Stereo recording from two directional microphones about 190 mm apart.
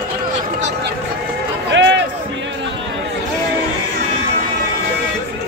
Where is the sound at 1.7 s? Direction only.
70° right (ahead or behind).